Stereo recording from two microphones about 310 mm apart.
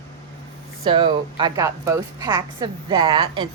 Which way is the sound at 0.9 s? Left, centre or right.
Centre.